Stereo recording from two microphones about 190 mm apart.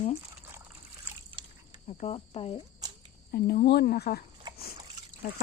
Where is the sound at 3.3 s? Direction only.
55° left (ahead or behind).